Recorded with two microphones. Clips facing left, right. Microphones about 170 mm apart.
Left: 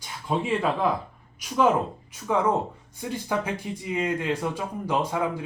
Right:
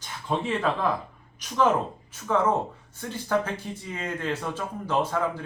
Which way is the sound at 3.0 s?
15° left (ahead or behind).